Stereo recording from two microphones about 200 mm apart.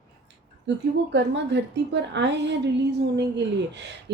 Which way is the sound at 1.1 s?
60° right (ahead or behind).